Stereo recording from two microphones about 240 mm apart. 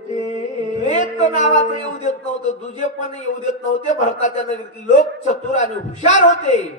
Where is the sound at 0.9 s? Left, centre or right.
Left.